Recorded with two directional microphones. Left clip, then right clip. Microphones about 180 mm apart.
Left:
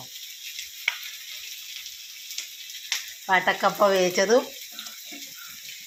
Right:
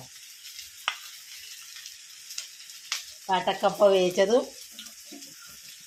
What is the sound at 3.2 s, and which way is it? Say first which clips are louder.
Speech: left 3 dB; 10° left (ahead or behind).